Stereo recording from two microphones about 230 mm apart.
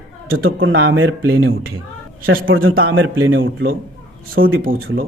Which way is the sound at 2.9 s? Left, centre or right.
Right.